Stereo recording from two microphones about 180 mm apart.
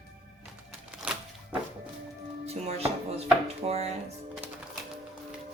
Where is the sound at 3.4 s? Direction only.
35° right (ahead or behind).